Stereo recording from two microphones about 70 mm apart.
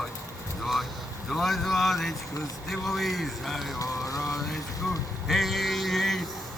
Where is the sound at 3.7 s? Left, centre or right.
Left.